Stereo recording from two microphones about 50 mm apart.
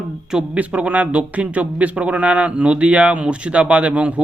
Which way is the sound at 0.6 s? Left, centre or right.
Right.